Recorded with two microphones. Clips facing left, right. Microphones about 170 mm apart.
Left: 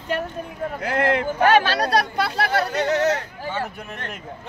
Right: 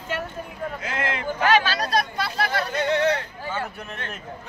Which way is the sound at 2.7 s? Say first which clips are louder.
Left 1 dB; 40° left (ahead or behind).